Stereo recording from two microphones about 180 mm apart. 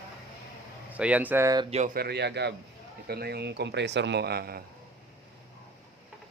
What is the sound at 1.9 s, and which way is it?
A man's voice, 65° right (ahead or behind).